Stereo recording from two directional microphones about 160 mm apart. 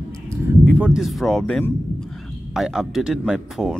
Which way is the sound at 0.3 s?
10° right (ahead or behind).